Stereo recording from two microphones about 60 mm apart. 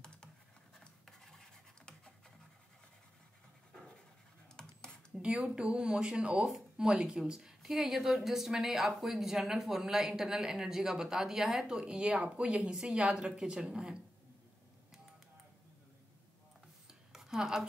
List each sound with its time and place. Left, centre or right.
0.7 s scratch: centre
5.1 s a woman's voice: centre
17.1 s a sound: centre